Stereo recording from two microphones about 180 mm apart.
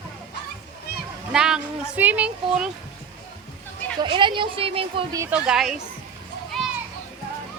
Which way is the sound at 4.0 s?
25° right (ahead or behind).